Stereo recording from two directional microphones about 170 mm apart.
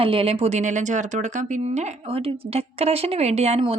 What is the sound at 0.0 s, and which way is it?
Speech, 35° right (ahead or behind).